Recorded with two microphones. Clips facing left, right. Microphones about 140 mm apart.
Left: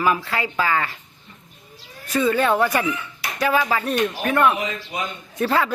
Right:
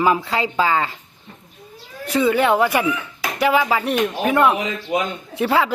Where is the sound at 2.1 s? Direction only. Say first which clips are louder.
Right 2 dB; 15° right (ahead or behind).